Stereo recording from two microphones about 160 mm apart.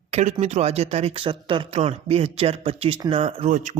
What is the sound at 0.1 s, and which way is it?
Speech, 45° right (ahead or behind).